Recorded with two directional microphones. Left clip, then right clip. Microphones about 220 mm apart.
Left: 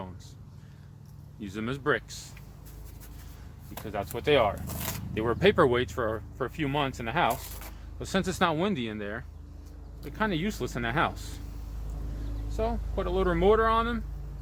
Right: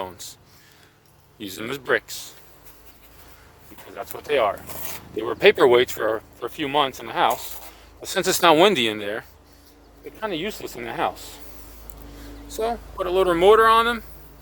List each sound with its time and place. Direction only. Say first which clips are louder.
0.0 s a sound: right 11 dB; 45° right (ahead or behind)
1.4 s speech: right 5 dB; 45° right (ahead or behind)
4.0 s speech: right 3 dB; 15° right (ahead or behind)
5.2 s speech: right 7 dB; 25° right (ahead or behind)
8.0 s speech: right 10 dB; 35° right (ahead or behind)
10.2 s speech: right 5 dB; 15° right (ahead or behind)
12.5 s speech: right 6 dB; 45° right (ahead or behind)